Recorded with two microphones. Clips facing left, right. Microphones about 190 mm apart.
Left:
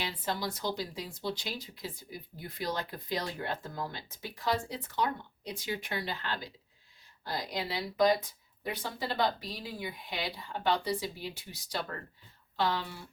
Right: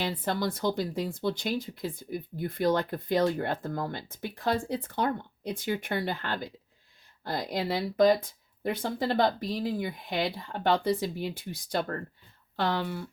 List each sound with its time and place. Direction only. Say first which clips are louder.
0.0 s speech: right 6 dB; 55° right (ahead or behind)